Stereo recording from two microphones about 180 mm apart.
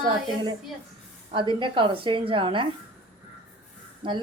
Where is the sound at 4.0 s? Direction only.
25° right (ahead or behind).